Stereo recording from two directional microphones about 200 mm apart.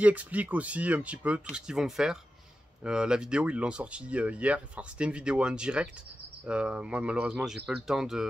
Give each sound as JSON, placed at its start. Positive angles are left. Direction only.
{"t": 0.0, "sound": "speech", "side_deg": -5}